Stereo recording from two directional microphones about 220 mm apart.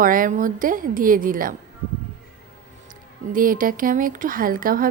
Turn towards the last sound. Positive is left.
turn(degrees=-40)  # may be behind; listen again after turning